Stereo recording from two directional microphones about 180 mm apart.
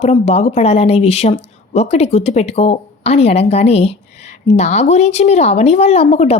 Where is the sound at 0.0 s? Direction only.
35° left (ahead or behind).